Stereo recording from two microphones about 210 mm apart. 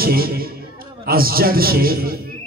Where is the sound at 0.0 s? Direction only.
45° right (ahead or behind).